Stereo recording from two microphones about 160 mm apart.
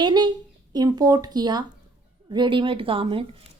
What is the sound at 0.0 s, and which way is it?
Speech, 25° right (ahead or behind).